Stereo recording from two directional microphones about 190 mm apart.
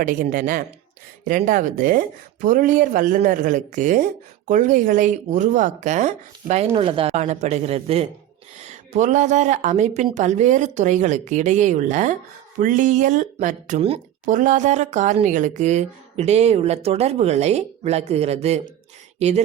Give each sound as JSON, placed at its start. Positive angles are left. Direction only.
{"t": 0.0, "sound": "speech", "side_deg": -45}